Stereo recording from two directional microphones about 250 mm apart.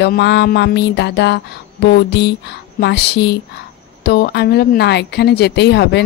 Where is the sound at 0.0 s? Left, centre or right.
Left.